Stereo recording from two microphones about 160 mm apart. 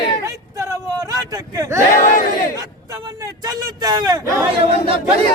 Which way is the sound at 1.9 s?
55° left (ahead or behind).